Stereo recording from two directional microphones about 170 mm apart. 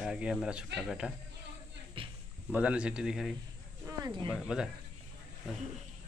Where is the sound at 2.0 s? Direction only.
30° right (ahead or behind).